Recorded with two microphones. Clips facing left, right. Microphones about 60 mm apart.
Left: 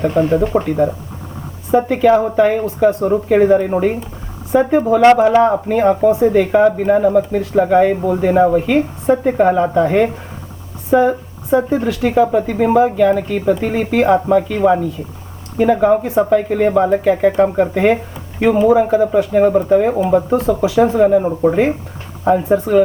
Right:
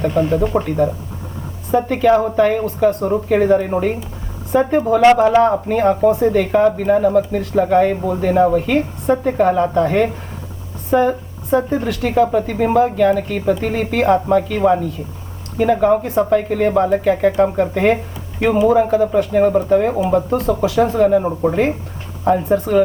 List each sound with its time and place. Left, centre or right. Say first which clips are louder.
0.0 s speech: left 2 dB; left
0.3 s speech: left 2 dB; centre
11.1 s speech: left 2 dB; centre